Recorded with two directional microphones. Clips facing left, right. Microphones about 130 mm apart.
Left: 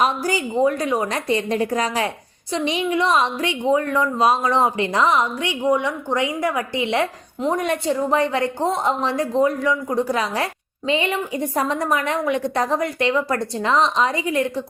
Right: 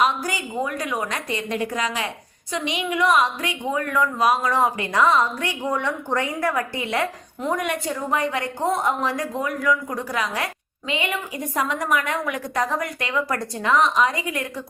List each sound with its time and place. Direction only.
0.0 s a woman's voice: 30° left (ahead or behind)